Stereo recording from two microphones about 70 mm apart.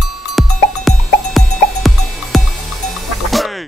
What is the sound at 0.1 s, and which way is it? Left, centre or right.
Music, centre.